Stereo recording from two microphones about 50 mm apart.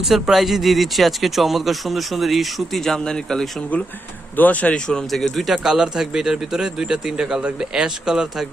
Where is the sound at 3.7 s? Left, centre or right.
Left.